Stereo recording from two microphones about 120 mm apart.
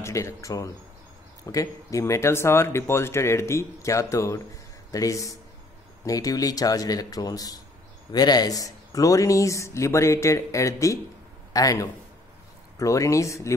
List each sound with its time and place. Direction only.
0.0 s speech: 25° left (ahead or behind)